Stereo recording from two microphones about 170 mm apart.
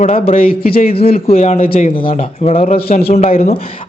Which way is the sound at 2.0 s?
35° left (ahead or behind).